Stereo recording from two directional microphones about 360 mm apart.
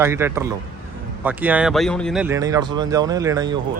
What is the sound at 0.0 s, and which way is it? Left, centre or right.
Speech, centre.